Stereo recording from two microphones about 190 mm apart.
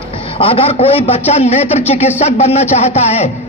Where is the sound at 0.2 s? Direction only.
30° left (ahead or behind).